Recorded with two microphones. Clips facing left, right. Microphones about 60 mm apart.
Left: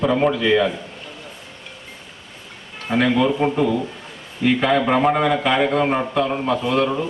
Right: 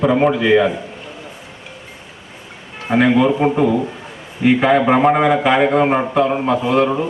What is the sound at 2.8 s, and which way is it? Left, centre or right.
A man's voice, centre.